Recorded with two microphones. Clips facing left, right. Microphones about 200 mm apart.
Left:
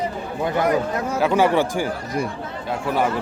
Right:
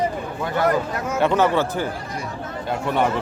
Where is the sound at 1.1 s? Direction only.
5° left (ahead or behind).